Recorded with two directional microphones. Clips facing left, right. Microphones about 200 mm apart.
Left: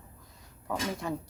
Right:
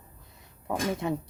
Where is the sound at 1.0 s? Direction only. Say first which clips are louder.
Right 4 dB; 20° right (ahead or behind).